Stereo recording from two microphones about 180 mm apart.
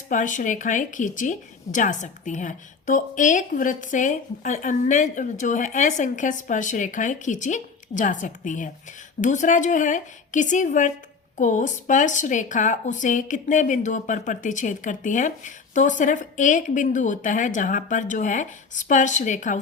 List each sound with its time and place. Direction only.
0.1 s a woman's voice: 45° left (ahead or behind)